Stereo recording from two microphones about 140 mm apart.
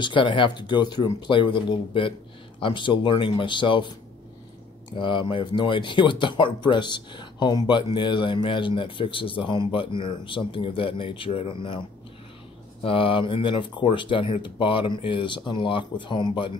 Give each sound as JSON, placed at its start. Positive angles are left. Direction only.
{"t": 0.0, "sound": "speech", "side_deg": 35}
{"t": 4.9, "sound": "speech", "side_deg": 35}
{"t": 12.8, "sound": "speech", "side_deg": 40}